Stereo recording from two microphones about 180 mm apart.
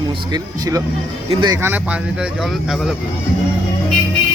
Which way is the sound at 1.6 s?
10° right (ahead or behind).